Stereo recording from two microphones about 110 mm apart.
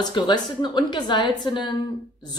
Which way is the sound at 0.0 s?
40° left (ahead or behind).